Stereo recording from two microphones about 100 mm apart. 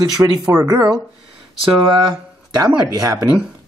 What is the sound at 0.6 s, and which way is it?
Speech, 40° right (ahead or behind).